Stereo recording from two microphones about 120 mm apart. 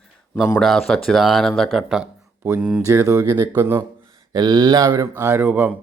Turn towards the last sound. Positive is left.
turn(degrees=-15)  # may be behind; listen again after turning